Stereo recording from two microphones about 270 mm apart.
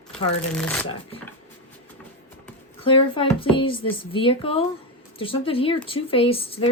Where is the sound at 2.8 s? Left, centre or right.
Centre.